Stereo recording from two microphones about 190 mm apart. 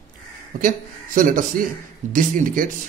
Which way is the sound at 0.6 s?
45° right (ahead or behind).